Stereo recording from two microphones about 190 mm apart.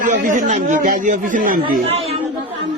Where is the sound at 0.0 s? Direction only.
40° right (ahead or behind).